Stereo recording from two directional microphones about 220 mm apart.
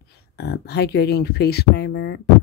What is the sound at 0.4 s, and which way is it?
Speech, 50° left (ahead or behind).